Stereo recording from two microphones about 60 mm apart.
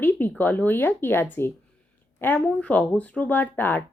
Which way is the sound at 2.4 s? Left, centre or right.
Left.